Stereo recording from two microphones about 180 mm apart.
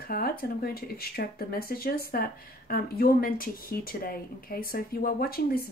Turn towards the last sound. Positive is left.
turn(degrees=55)  # may be behind; listen again after turning